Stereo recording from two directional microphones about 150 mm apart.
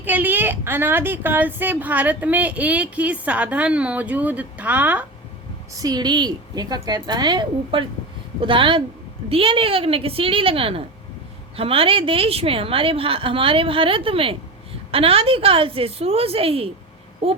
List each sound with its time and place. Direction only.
0.0 s a woman's voice: 10° right (ahead or behind)
5.7 s a woman's voice: 25° right (ahead or behind)